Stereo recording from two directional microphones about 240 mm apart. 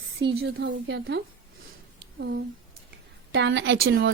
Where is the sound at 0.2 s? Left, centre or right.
Right.